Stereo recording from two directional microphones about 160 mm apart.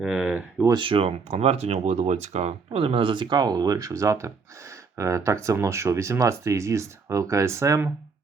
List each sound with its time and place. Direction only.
0.0 s speech: 5° right (ahead or behind)
0.7 s speech: 30° right (ahead or behind)